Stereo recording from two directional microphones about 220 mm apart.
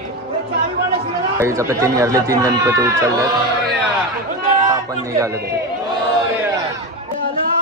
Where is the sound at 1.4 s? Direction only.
15° right (ahead or behind).